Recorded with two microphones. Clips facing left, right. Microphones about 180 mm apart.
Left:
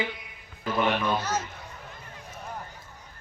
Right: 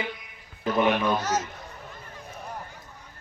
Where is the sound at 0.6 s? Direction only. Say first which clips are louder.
Right 3 dB; 20° right (ahead or behind).